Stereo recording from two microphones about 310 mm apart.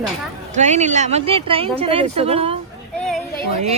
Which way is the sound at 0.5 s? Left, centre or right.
Right.